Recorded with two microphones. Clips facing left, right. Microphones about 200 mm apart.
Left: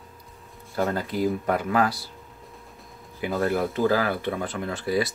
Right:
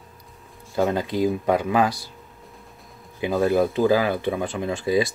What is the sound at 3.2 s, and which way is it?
Speech, 15° right (ahead or behind).